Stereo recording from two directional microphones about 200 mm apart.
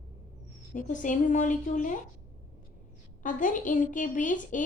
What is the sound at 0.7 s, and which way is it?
A woman's voice, 40° left (ahead or behind).